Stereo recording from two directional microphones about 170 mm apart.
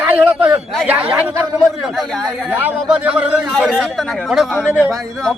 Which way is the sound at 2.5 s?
10° right (ahead or behind).